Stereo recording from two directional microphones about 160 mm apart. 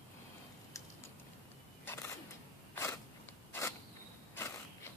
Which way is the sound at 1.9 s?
15° left (ahead or behind).